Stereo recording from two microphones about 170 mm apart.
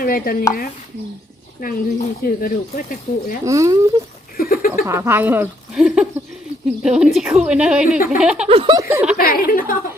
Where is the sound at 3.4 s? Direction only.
20° right (ahead or behind).